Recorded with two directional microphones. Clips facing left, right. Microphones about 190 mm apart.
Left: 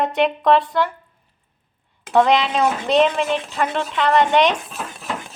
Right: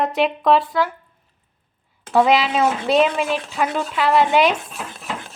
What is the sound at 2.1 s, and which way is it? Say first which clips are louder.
A woman's voice: even; 5° right (ahead or behind).